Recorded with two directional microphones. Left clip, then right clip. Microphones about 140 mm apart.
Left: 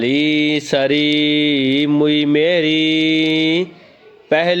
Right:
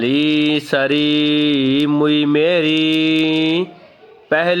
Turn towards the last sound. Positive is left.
turn(degrees=5)  # may be behind; listen again after turning